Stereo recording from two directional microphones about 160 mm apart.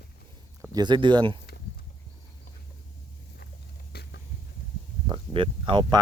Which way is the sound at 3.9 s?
80° left.